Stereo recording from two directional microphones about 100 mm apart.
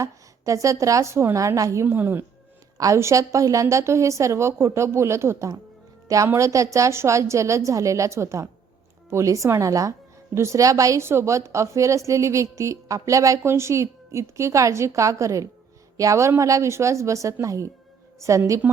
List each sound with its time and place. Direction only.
0.0 s a woman's voice: 30° right (ahead or behind)
2.7 s a woman's voice: 35° right (ahead or behind)